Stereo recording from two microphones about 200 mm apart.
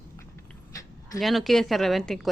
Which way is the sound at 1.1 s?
Centre (ahead or behind).